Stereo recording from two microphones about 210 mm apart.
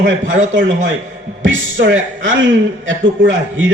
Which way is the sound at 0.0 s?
65° right (ahead or behind).